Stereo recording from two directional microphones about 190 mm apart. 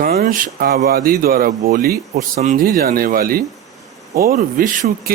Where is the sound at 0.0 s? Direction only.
50° right (ahead or behind).